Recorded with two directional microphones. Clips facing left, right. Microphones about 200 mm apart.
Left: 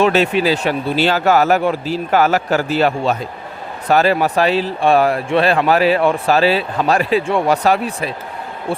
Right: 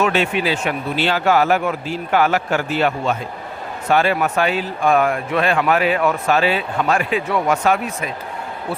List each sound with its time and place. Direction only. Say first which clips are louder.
0.0 s speech: left 4 dB; 35° left (ahead or behind)